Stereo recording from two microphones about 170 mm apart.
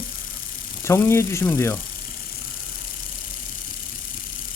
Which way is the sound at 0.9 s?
15° left (ahead or behind).